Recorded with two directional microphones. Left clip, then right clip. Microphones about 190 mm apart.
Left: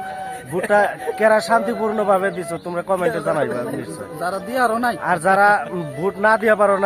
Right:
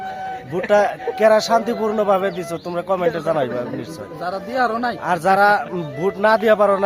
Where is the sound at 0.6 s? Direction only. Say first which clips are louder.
Right 1 dB; 10° right (ahead or behind).